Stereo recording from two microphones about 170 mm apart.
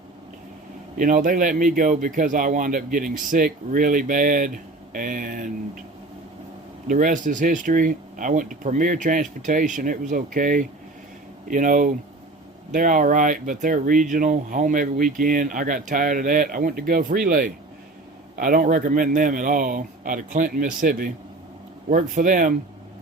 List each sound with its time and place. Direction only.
0.9 s speech: 50° right (ahead or behind)
6.8 s speech: 50° right (ahead or behind)
21.8 s speech: 50° right (ahead or behind)